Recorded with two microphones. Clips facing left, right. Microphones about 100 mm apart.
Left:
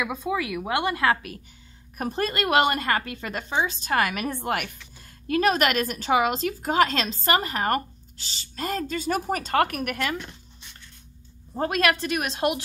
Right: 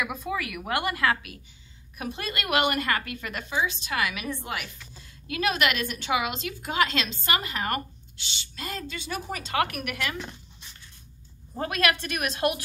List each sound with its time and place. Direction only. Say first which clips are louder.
0.0 s a woman's voice: left 3 dB; 25° left (ahead or behind)
2.0 s a woman's voice: left 7 dB; 40° left (ahead or behind)
11.5 s a woman's voice: left 3 dB; 35° left (ahead or behind)